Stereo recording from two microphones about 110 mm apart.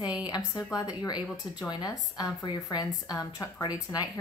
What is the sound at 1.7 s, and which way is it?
A woman's voice, 40° left (ahead or behind).